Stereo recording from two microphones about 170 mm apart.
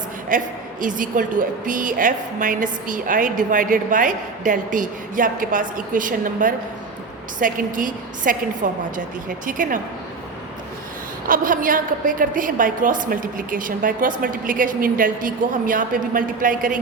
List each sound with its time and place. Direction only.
0.3 s a woman's voice: 50° right (ahead or behind)
11.3 s a woman's voice: 55° right (ahead or behind)